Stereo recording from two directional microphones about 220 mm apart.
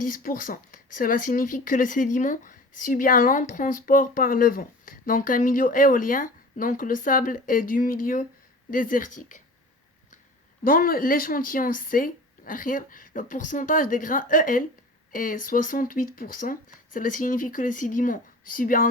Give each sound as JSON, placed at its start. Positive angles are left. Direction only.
{"t": 0.0, "sound": "speech", "side_deg": 40}
{"t": 10.6, "sound": "speech", "side_deg": 40}